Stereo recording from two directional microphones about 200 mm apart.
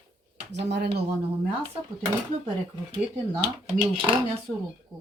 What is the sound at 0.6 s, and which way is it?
Speech, 60° right (ahead or behind).